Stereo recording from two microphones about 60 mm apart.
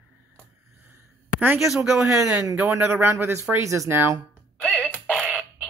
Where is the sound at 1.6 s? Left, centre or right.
Centre.